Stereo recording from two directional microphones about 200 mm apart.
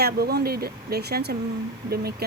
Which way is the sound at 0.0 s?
50° right (ahead or behind).